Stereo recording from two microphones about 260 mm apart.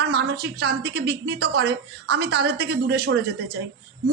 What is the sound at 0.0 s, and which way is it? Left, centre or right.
A woman's voice, right.